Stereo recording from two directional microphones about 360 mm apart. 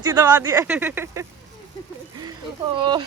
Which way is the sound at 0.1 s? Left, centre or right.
Centre.